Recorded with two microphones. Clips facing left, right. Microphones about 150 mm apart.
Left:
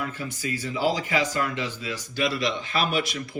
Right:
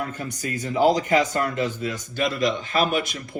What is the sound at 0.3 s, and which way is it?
Speech, 45° right (ahead or behind).